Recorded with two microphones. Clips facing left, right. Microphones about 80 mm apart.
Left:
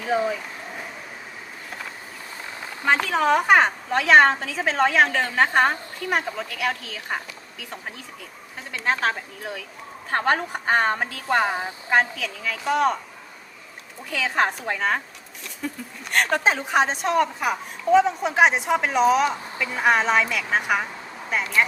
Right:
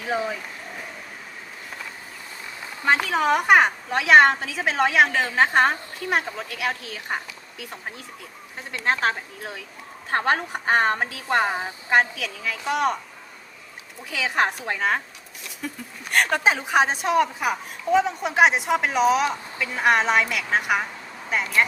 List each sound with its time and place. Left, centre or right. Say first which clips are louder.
2.8 s speech: even; centre
8.7 s speech: even; centre
14.1 s a woman's voice: even; centre